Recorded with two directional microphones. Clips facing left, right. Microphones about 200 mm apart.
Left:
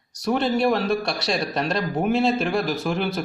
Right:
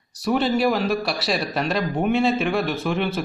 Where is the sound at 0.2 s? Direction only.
5° right (ahead or behind).